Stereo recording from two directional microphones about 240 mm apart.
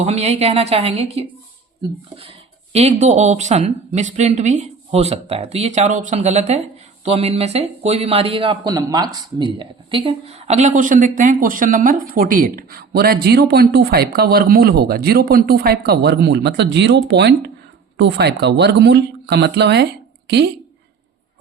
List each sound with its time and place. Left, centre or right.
0.0 s speech: right